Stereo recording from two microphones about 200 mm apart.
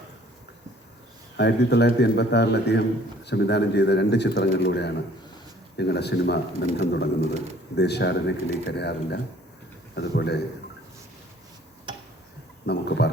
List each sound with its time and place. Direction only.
1.4 s a man's voice: 55° left (ahead or behind)
12.6 s a man's voice: 55° left (ahead or behind)